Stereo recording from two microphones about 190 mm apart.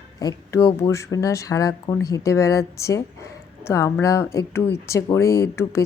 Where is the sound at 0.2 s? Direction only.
15° left (ahead or behind).